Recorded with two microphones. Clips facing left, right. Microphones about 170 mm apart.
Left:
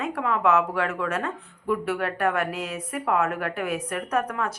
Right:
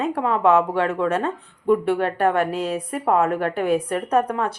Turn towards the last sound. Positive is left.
turn(degrees=-30)  # may be behind; listen again after turning